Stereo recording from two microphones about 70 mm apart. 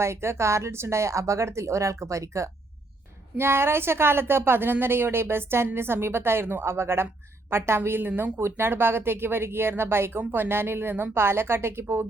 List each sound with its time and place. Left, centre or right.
0.0 s speech: right
3.3 s speech: right